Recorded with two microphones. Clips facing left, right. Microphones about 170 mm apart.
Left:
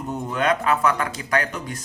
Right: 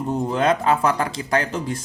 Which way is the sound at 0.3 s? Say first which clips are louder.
Right 1 dB; 30° right (ahead or behind).